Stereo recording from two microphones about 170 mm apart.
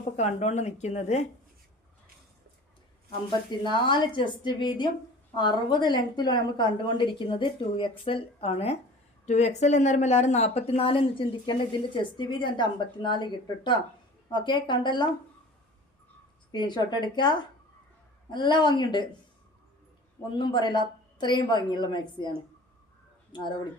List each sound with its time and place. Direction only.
0.2 s speech: 40° left (ahead or behind)
3.2 s a woman's voice: 25° left (ahead or behind)
16.5 s a woman's voice: 25° left (ahead or behind)
20.3 s a woman's voice: 30° left (ahead or behind)